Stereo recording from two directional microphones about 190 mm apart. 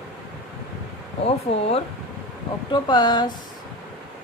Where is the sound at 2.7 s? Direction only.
20° left (ahead or behind).